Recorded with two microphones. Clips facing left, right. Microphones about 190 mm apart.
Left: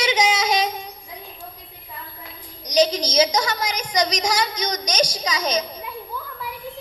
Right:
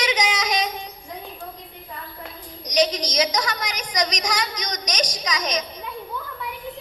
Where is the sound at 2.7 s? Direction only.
30° left (ahead or behind).